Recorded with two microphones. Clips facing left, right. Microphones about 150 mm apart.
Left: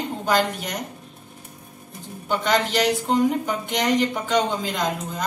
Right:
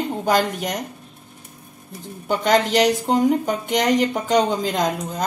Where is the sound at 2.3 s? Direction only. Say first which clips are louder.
Right 4 dB; 45° right (ahead or behind).